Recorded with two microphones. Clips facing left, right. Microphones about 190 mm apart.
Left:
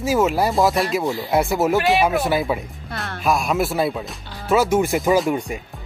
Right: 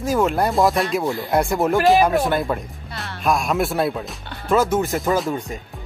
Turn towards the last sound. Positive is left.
turn(degrees=10)  # may be behind; listen again after turning